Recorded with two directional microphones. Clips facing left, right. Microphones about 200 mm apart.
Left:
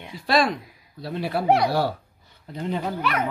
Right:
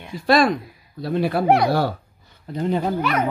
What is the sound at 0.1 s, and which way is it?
Speech, 50° right (ahead or behind).